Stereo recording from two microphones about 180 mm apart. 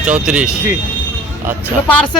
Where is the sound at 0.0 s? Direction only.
5° right (ahead or behind).